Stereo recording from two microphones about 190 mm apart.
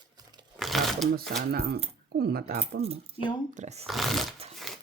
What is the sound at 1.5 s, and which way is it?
Speech, 55° right (ahead or behind).